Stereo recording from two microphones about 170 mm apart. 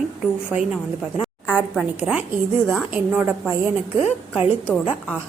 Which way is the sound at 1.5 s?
5° left (ahead or behind).